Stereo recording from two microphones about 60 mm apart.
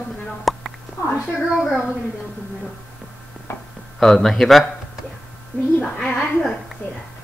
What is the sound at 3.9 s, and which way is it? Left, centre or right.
Speech, centre.